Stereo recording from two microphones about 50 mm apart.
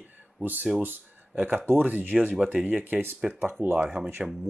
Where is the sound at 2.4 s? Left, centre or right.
Right.